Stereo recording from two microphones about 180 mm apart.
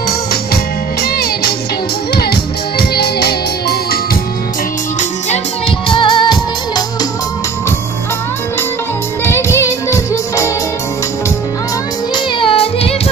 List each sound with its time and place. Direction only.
1.0 s music: 60° left (ahead or behind)
5.9 s music: 25° left (ahead or behind)
9.2 s music: 15° left (ahead or behind)
12.4 s music: 30° left (ahead or behind)